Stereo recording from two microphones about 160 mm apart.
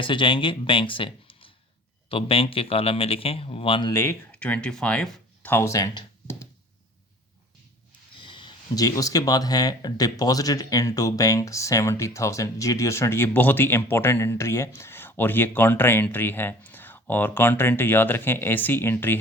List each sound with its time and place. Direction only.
0.0 s speech: 30° left (ahead or behind)
3.9 s speech: 15° left (ahead or behind)
8.2 s speech: 30° left (ahead or behind); by 19.2 s 15° left (ahead or behind)